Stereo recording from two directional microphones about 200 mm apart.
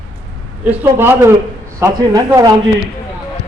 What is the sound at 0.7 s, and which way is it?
A man's voice, 10° right (ahead or behind).